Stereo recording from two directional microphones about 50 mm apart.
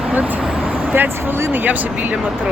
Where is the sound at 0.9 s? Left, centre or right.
Right.